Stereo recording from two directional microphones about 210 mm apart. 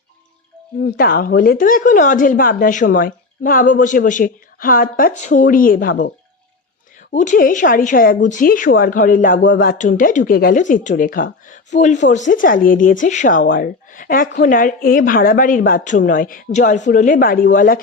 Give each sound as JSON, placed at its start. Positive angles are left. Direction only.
{"t": 0.8, "sound": "a woman's voice", "side_deg": 45}
{"t": 7.1, "sound": "a woman's voice", "side_deg": 35}